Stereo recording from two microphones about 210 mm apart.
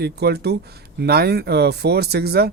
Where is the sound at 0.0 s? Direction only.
50° right (ahead or behind).